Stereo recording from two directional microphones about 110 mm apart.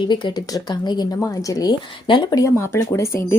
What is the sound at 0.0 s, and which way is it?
Speech, 45° left (ahead or behind).